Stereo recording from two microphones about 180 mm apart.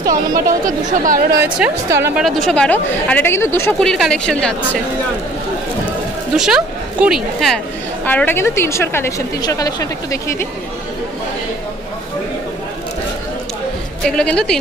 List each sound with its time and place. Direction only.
0.1 s speech: 50° right (ahead or behind)
1.4 s a woman's voice: 15° right (ahead or behind)
2.2 s a woman's voice: centre (ahead or behind)
3.8 s a woman's voice: 5° left (ahead or behind)
6.3 s a woman's voice: 5° right (ahead or behind); by 10.3 s 20° left (ahead or behind)
14.0 s a woman's voice: 5° left (ahead or behind)